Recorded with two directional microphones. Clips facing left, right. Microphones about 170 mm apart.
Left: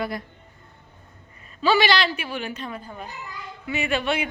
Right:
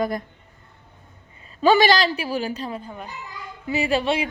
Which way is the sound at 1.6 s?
45° right (ahead or behind).